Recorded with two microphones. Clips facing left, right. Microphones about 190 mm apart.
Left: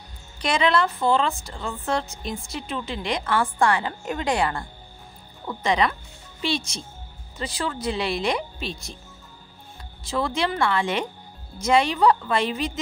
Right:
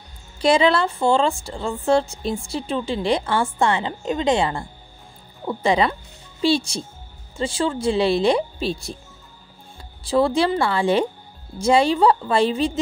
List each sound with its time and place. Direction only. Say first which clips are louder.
0.4 s a woman's voice: right 5 dB; 30° right (ahead or behind)
10.0 s a woman's voice: right 7 dB; 30° right (ahead or behind)